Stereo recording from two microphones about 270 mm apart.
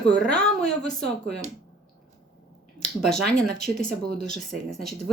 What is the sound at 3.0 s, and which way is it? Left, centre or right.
Speech, centre.